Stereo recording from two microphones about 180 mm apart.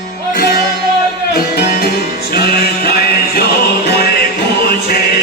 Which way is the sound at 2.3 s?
60° left (ahead or behind).